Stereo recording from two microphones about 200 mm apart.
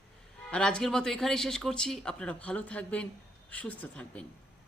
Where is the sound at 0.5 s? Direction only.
5° left (ahead or behind).